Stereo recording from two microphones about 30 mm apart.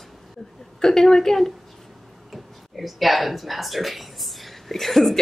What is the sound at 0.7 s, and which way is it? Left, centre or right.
Speech, centre.